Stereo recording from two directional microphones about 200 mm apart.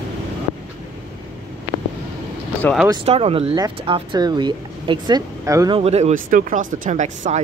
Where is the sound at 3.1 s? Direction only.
30° right (ahead or behind).